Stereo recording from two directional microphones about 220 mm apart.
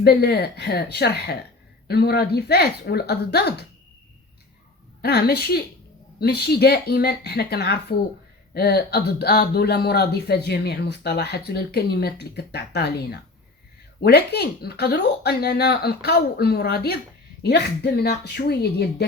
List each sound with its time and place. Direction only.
0.0 s speech: 45° left (ahead or behind)
5.0 s speech: 45° left (ahead or behind)